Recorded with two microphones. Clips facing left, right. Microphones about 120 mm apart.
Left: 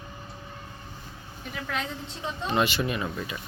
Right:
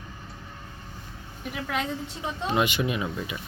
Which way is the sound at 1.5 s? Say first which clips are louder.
Right 3 dB; 10° right (ahead or behind).